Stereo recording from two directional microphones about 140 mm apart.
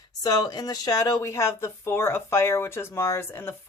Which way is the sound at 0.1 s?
25° left (ahead or behind).